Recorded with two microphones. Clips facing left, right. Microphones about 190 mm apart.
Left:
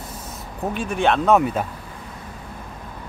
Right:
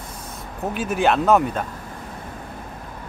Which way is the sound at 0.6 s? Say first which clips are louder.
Even; 5° right (ahead or behind).